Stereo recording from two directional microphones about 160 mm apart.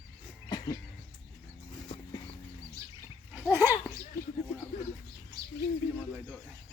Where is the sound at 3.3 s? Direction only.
15° right (ahead or behind).